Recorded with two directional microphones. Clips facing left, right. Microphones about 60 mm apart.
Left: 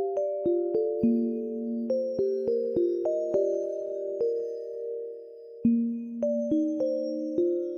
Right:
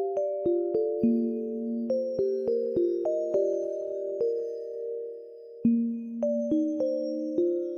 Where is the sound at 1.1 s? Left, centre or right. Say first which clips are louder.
Even; left.